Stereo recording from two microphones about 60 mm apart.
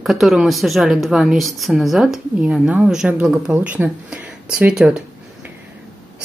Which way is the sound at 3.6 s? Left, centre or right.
Right.